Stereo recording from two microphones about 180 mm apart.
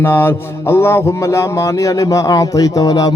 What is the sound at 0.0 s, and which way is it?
Mantra, 10° left (ahead or behind).